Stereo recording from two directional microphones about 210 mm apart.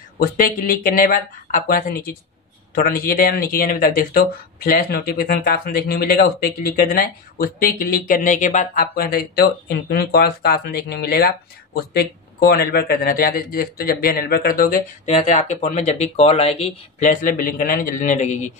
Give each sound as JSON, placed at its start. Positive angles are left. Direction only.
{"t": 0.2, "sound": "speech", "side_deg": 45}